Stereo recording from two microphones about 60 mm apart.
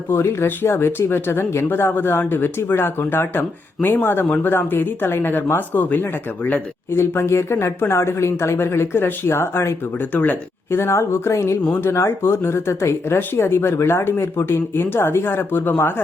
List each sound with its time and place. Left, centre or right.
0.1 s speech: left
6.9 s speech: left
10.0 s speech: left
10.7 s speech: left